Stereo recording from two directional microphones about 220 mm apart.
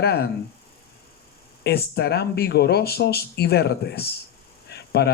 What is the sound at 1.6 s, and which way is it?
Speech, 45° left (ahead or behind).